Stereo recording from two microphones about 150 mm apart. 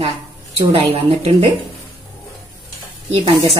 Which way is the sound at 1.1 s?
40° right (ahead or behind).